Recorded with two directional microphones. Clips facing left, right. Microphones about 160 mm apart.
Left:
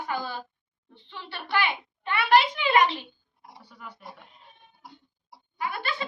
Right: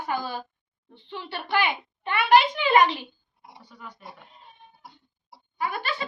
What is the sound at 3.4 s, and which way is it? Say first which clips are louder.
Speech: right 1 dB; centre (ahead or behind).